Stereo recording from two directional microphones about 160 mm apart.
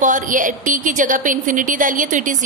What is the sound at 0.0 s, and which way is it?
A woman's voice, 55° right (ahead or behind).